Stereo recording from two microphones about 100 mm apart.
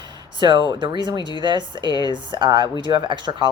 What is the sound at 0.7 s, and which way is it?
Speech, 50° right (ahead or behind).